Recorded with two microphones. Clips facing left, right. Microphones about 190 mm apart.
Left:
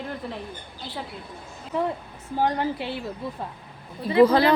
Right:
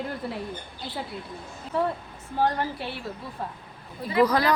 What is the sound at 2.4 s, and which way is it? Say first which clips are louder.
Speech: left 1 dB; 15° left (ahead or behind).